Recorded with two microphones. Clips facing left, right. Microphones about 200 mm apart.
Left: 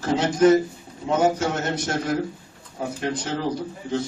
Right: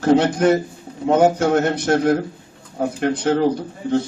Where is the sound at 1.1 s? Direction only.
60° right (ahead or behind).